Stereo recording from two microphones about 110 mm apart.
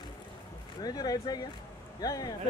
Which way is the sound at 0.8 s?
35° left (ahead or behind).